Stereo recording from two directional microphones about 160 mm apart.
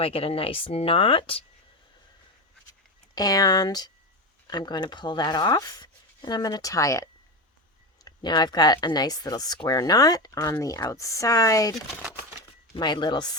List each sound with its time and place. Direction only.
0.0 s speech: 35° left (ahead or behind)
3.2 s speech: 25° left (ahead or behind)
12.7 s speech: 30° left (ahead or behind)